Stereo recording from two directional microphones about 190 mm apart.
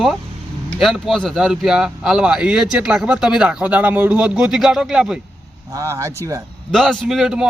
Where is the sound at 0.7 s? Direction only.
Centre (ahead or behind).